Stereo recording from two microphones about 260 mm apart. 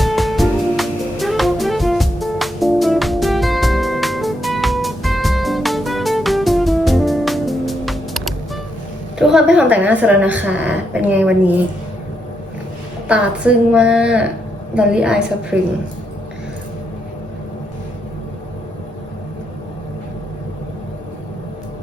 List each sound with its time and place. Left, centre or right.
0.0 s music: centre
9.1 s a woman's voice: centre
13.1 s a woman's voice: centre